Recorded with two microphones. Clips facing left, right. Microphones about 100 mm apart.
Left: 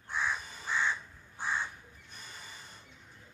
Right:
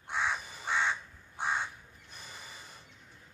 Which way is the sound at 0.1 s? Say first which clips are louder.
Right 1 dB; 70° right (ahead or behind).